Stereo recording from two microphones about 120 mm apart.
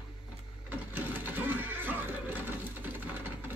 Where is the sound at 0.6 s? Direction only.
15° right (ahead or behind).